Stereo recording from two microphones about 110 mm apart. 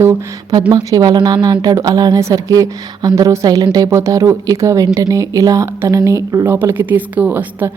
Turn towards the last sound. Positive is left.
turn(degrees=-15)  # may be behind; listen again after turning